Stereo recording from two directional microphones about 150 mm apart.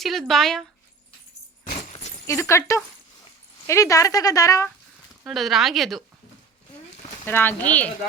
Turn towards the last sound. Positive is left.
turn(degrees=10)  # may be behind; listen again after turning